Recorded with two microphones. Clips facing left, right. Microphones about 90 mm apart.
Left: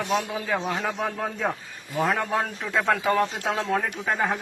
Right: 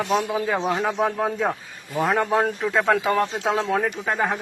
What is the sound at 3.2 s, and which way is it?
Speech, 20° right (ahead or behind).